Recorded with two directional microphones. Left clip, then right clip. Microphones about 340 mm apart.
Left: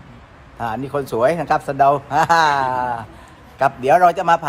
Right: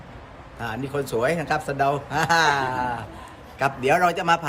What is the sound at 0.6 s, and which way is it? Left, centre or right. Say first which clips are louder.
Speech: left 5 dB; centre.